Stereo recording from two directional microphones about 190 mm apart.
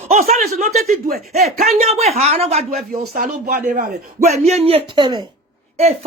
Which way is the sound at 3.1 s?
55° right (ahead or behind).